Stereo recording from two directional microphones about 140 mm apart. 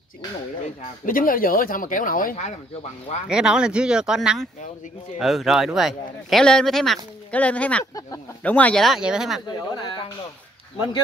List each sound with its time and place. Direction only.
1.0 s speech: 90° left; by 2.5 s 65° left (ahead or behind)
3.3 s speech: 5° right (ahead or behind); by 7.8 s 10° left (ahead or behind)
7.8 s speech: 25° left (ahead or behind)
8.4 s speech: 10° left (ahead or behind)
9.6 s speech: 30° left (ahead or behind)